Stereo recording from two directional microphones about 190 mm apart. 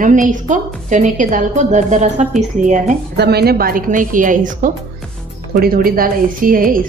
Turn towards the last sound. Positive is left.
turn(degrees=-45)  # may be behind; listen again after turning